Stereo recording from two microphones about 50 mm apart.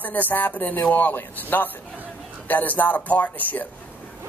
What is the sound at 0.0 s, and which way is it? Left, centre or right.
Speech, left.